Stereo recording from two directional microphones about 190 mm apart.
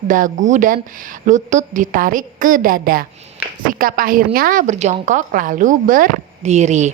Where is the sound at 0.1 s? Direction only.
40° right (ahead or behind).